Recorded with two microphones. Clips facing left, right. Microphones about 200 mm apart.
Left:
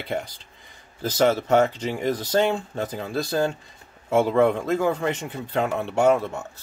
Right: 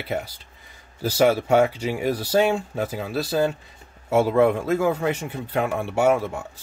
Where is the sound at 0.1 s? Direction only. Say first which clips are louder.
Even; 5° right (ahead or behind).